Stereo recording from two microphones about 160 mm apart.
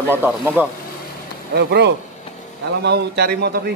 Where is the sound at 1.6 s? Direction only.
90° right.